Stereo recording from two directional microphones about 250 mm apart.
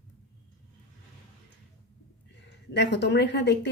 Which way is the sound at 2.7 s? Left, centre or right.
Left.